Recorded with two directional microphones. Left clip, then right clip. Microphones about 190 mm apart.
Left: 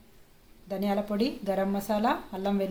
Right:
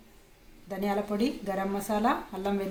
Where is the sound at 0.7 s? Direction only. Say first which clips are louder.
Left 1 dB; 55° left (ahead or behind).